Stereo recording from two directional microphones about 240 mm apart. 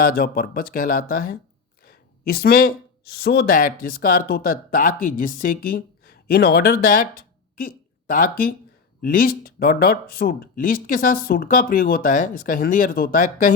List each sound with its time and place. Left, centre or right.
0.0 s speech: left
8.1 s speech: left